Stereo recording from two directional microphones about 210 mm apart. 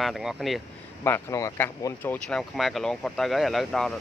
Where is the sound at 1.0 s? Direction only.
15° left (ahead or behind).